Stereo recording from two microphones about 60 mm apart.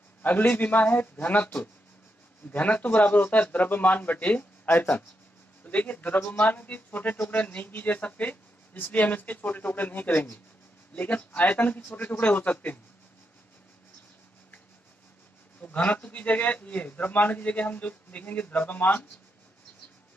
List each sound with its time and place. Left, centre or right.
0.2 s speech: left
15.6 s speech: left